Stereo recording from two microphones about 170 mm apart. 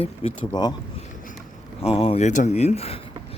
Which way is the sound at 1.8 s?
35° left (ahead or behind).